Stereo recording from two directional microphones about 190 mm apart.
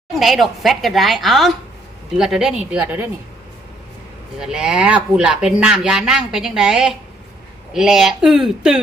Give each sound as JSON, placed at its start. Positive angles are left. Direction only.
{"t": 0.2, "sound": "a woman's voice", "side_deg": 0}
{"t": 4.4, "sound": "speech", "side_deg": -5}